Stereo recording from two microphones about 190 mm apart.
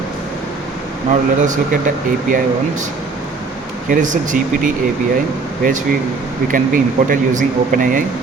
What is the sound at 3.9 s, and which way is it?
Speech, 40° right (ahead or behind).